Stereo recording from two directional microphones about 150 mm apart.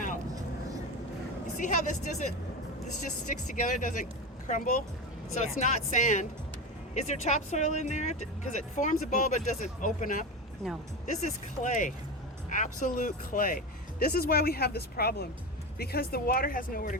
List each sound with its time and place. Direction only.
1.5 s speech: 60° left (ahead or behind)
14.0 s speech: 85° left; by 17.0 s 65° left (ahead or behind)